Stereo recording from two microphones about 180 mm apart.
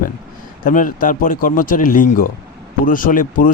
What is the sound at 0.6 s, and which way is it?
Speech, 50° left (ahead or behind).